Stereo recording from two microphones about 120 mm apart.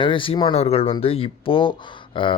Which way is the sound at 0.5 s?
60° left (ahead or behind).